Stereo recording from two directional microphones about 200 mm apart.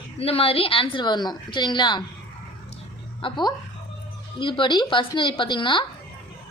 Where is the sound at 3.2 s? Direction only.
20° left (ahead or behind).